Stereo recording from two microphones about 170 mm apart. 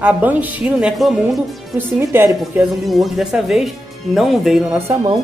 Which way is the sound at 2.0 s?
15° right (ahead or behind).